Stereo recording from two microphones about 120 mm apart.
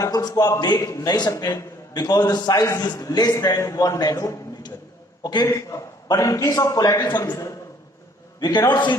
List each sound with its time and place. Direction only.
0.0 s a man's voice: 30° left (ahead or behind)
5.2 s a man's voice: 40° left (ahead or behind)
5.5 s a man's voice: 25° left (ahead or behind)
8.4 s a man's voice: 35° left (ahead or behind)